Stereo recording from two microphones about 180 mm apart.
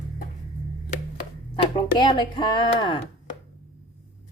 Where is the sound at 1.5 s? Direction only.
25° left (ahead or behind).